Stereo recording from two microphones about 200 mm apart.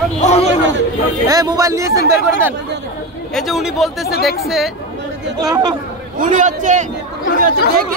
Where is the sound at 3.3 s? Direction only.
Centre (ahead or behind).